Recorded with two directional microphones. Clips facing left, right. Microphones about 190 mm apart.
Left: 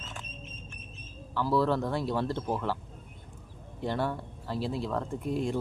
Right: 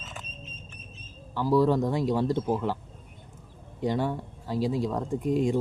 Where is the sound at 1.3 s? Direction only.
15° right (ahead or behind).